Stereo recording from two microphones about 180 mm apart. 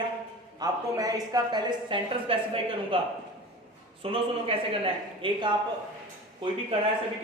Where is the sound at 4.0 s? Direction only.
30° right (ahead or behind).